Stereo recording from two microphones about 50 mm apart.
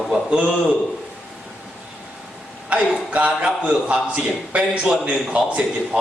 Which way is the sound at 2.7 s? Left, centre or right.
Right.